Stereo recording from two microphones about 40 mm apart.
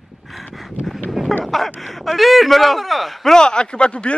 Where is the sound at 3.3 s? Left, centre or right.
Left.